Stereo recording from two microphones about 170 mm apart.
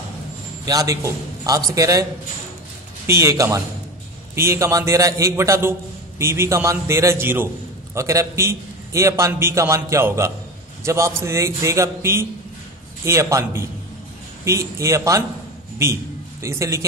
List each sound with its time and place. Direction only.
0.7 s a man's voice: 20° right (ahead or behind)
3.1 s a man's voice: 15° right (ahead or behind)